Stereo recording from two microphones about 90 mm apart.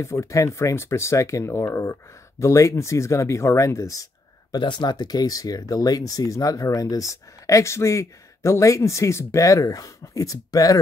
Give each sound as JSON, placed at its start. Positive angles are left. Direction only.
{"t": 0.0, "sound": "speech", "side_deg": 30}
{"t": 4.6, "sound": "speech", "side_deg": 55}